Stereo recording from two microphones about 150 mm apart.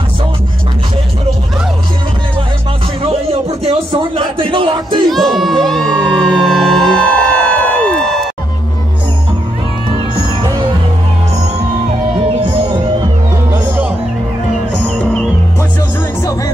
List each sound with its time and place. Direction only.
3.6 s speech: 40° right (ahead or behind)
5.1 s crowd: centre (ahead or behind)